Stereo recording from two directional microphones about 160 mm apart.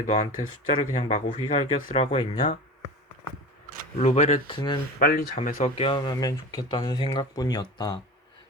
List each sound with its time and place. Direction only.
0.0 s speech: 50° left (ahead or behind)
3.9 s speech: 45° left (ahead or behind)
4.4 s speech: 30° left (ahead or behind)
4.9 s speech: 65° left (ahead or behind)
5.4 s speech: 50° left (ahead or behind); by 8.0 s 25° left (ahead or behind)